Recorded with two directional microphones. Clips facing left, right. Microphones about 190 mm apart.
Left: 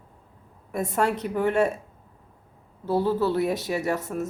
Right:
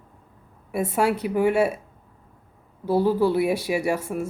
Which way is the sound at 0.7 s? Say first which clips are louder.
Right 2 dB; 10° right (ahead or behind).